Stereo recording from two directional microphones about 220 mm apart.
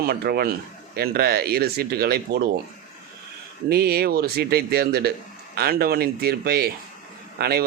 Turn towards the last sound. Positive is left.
turn(degrees=-45)  # may be behind; listen again after turning